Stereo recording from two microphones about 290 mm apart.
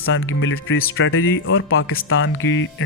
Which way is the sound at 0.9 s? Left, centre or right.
Left.